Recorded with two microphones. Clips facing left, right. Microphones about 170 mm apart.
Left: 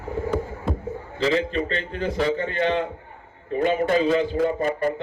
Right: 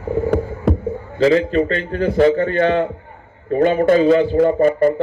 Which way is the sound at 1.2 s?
50° right (ahead or behind).